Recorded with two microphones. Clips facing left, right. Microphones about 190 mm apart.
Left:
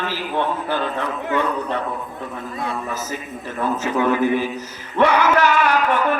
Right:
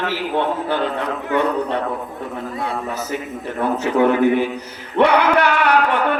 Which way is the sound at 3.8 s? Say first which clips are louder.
Right 4 dB; 60° right (ahead or behind).